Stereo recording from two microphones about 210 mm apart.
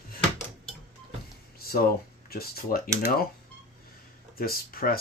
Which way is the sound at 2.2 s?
45° left (ahead or behind).